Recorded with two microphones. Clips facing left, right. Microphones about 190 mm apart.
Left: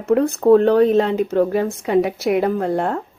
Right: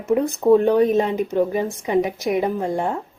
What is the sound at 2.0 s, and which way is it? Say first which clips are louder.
Speech: left 3 dB; 10° left (ahead or behind).